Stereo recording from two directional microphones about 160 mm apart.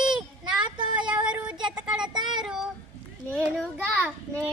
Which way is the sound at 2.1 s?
30° right (ahead or behind).